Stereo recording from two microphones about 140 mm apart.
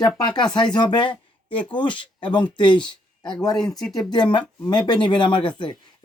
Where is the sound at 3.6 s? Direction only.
5° left (ahead or behind).